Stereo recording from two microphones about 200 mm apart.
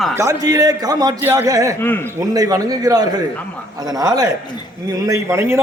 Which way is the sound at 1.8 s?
10° left (ahead or behind).